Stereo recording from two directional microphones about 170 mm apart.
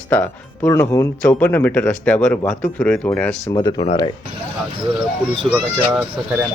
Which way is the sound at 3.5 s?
25° left (ahead or behind).